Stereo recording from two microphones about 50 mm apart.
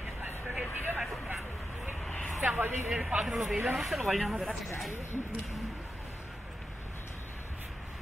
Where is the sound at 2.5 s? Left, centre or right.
Right.